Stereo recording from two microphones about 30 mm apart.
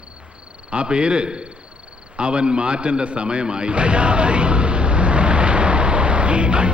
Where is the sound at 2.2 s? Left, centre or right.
Right.